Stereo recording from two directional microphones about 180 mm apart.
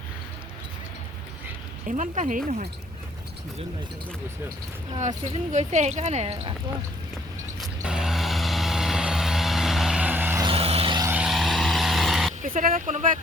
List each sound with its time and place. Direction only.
1.9 s speech: 45° right (ahead or behind)
4.9 s speech: 40° right (ahead or behind)
7.6 s vehicle: 5° right (ahead or behind)
10.4 s vehicle: 35° right (ahead or behind)
11.0 s vehicle: 10° right (ahead or behind)
12.4 s speech: 50° right (ahead or behind)